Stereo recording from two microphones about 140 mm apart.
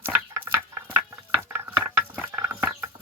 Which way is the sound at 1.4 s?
15° right (ahead or behind).